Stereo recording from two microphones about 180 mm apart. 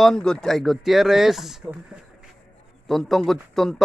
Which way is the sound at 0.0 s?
5° left (ahead or behind).